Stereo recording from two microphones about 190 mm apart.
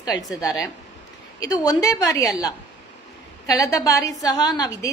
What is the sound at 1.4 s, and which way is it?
A woman's voice, 20° left (ahead or behind).